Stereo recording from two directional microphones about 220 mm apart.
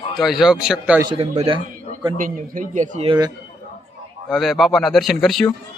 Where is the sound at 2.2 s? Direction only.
35° right (ahead or behind).